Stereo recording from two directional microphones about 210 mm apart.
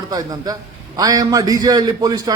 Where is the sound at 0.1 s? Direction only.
15° right (ahead or behind).